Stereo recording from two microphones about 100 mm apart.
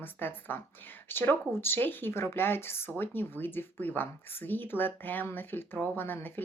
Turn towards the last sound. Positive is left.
turn(degrees=20)  # may be behind; listen again after turning